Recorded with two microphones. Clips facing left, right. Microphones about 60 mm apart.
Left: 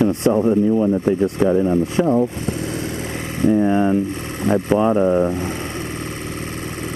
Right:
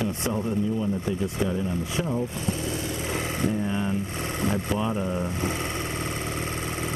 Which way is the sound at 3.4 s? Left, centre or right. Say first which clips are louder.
Left 14 dB; left.